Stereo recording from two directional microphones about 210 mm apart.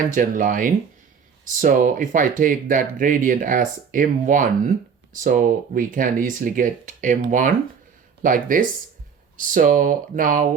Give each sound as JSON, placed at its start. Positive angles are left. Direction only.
{"t": 0.1, "sound": "speech", "side_deg": -40}